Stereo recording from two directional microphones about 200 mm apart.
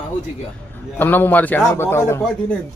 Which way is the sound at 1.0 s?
10° left (ahead or behind).